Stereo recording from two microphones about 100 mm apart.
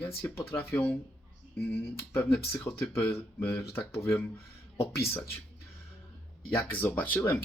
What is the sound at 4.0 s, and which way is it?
Speech, 20° left (ahead or behind).